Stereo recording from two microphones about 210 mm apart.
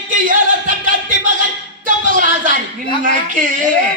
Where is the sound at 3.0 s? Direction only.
40° right (ahead or behind).